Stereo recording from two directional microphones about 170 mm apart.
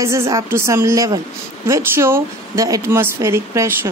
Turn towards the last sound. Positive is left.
turn(degrees=-15)  # may be behind; listen again after turning